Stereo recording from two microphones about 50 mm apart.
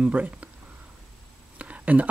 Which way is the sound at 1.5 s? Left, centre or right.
Right.